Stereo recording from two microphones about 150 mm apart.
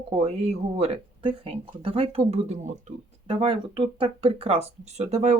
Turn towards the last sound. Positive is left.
turn(degrees=-50)  # may be behind; listen again after turning